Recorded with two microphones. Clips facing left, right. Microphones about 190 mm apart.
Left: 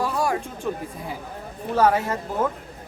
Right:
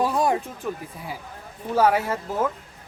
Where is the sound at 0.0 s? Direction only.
20° right (ahead or behind).